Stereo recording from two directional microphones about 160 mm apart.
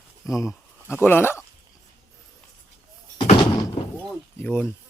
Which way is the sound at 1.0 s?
15° left (ahead or behind).